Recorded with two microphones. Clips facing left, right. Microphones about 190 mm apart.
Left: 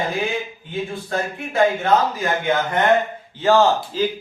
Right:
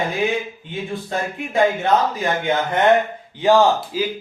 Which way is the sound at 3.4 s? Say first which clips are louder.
Right 1 dB; 15° right (ahead or behind).